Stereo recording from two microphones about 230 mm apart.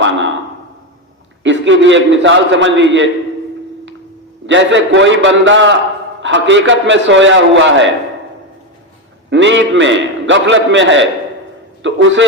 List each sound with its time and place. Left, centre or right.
1.5 s a man's voice: right
4.4 s a man's voice: right
9.3 s a man's voice: right